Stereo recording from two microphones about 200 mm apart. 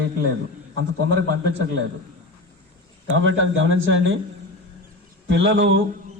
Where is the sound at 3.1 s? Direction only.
75° right (ahead or behind).